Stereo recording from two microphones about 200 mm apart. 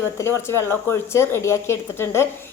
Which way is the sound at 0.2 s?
15° left (ahead or behind).